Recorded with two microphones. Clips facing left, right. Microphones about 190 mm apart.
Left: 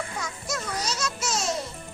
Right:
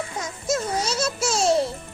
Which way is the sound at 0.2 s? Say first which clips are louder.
Right 7 dB; 25° right (ahead or behind).